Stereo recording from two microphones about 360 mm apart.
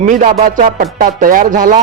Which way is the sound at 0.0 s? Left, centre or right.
Right.